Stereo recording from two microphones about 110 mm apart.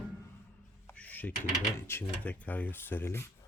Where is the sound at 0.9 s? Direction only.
15° left (ahead or behind).